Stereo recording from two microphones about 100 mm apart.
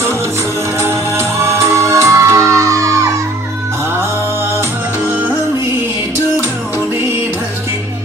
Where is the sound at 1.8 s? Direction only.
30° right (ahead or behind).